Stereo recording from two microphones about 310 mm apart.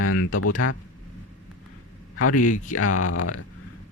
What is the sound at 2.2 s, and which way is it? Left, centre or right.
Speech, left.